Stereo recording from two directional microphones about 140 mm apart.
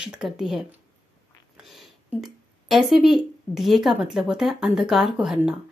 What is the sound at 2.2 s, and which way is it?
A woman's voice, centre (ahead or behind).